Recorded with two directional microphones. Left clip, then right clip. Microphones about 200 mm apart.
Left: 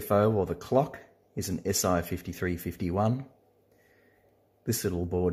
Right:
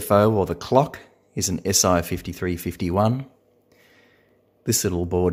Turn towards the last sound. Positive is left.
turn(degrees=-20)  # may be behind; listen again after turning